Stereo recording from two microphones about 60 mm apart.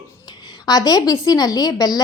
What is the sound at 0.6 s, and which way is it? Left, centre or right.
A woman's voice, left.